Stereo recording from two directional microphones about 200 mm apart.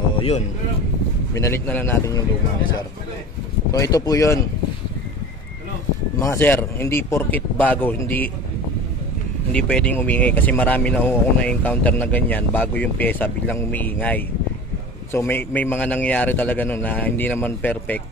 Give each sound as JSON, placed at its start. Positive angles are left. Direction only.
{"t": 1.3, "sound": "speech", "side_deg": 15}
{"t": 3.7, "sound": "speech", "side_deg": 20}
{"t": 6.1, "sound": "speech", "side_deg": 15}
{"t": 9.5, "sound": "speech", "side_deg": 5}